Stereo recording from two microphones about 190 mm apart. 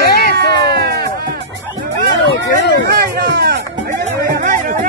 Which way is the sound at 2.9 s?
55° right (ahead or behind).